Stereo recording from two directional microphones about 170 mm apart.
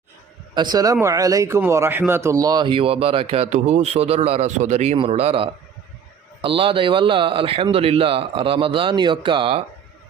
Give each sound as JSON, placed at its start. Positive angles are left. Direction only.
{"t": 0.5, "sound": "a man's voice", "side_deg": -25}